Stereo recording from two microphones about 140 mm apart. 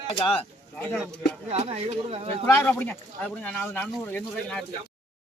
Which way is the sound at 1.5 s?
50° right (ahead or behind).